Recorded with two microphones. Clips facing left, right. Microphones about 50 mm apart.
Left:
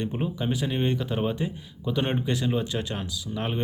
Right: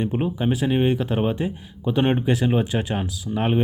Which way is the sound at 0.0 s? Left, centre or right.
Right.